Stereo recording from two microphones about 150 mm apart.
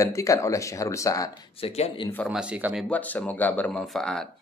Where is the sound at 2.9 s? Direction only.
10° left (ahead or behind).